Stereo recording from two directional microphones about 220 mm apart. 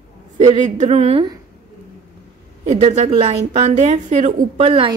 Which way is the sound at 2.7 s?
30° right (ahead or behind).